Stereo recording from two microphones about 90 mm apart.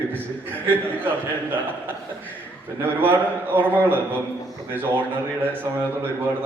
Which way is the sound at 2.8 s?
20° right (ahead or behind).